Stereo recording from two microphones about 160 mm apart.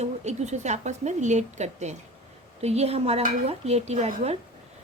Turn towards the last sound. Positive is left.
turn(degrees=-40)  # may be behind; listen again after turning